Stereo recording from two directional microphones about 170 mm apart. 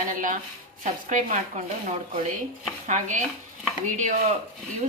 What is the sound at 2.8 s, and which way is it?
Speech, 45° right (ahead or behind).